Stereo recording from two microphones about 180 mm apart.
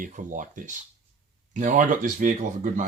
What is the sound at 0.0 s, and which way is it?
Speech, 45° right (ahead or behind).